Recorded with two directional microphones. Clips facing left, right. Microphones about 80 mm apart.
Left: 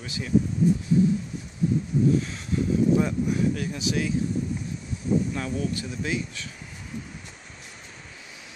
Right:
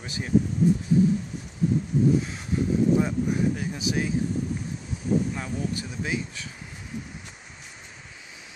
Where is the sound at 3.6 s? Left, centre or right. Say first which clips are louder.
Even; right.